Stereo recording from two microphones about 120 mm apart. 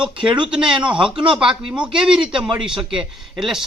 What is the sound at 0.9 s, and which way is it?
Speech, 45° right (ahead or behind).